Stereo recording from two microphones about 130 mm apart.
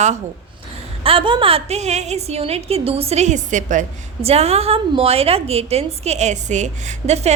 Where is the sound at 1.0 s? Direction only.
45° right (ahead or behind).